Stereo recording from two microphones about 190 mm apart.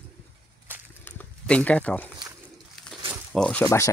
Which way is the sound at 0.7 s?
10° right (ahead or behind).